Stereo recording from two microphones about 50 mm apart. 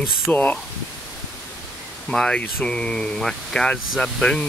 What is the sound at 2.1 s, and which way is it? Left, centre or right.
Speech, centre.